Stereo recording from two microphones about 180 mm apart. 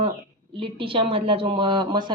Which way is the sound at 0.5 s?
30° right (ahead or behind).